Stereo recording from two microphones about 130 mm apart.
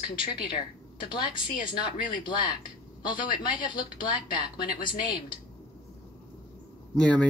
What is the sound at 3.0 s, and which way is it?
Speech, 35° left (ahead or behind).